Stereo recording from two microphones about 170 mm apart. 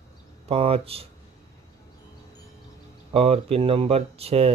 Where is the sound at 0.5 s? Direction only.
35° right (ahead or behind).